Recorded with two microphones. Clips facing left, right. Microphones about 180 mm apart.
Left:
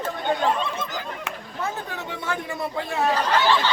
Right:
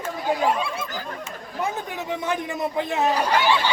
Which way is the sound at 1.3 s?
65° left (ahead or behind).